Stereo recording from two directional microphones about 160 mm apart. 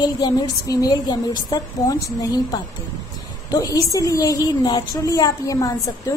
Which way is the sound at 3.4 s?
25° left (ahead or behind).